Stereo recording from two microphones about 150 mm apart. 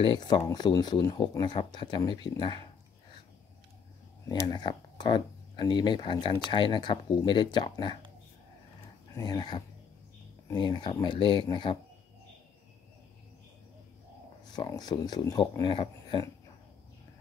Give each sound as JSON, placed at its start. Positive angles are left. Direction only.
{"t": 0.0, "sound": "speech", "side_deg": 25}
{"t": 4.3, "sound": "speech", "side_deg": 30}
{"t": 9.1, "sound": "speech", "side_deg": 25}
{"t": 14.5, "sound": "speech", "side_deg": 25}